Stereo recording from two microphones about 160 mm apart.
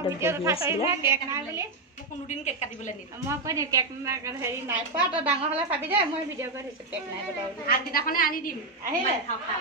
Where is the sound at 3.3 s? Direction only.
20° right (ahead or behind).